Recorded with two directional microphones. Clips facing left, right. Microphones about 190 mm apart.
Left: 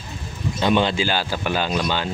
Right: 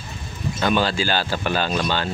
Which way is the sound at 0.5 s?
20° left (ahead or behind).